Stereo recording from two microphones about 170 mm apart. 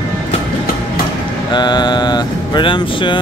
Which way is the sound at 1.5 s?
25° left (ahead or behind).